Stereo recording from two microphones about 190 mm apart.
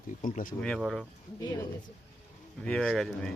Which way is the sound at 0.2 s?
45° left (ahead or behind).